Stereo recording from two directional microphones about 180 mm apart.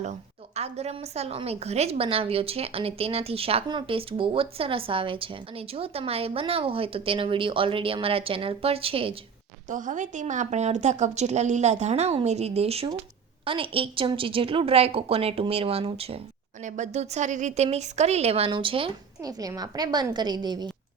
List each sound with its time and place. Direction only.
0.0 s a woman's voice: 35° right (ahead or behind)
9.6 s a woman's voice: 45° right (ahead or behind)
16.6 s a woman's voice: 40° right (ahead or behind); by 20.7 s 25° right (ahead or behind)